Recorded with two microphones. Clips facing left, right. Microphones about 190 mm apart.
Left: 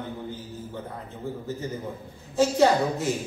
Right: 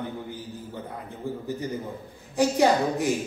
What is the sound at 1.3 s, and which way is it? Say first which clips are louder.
Speech: right 2 dB; 15° right (ahead or behind).